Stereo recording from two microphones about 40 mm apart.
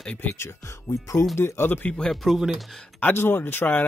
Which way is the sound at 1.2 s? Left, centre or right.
Left.